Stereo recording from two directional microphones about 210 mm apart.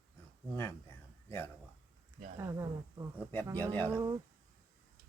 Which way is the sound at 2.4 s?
15° right (ahead or behind).